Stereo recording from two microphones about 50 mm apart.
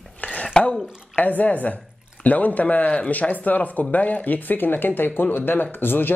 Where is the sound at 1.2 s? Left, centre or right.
Left.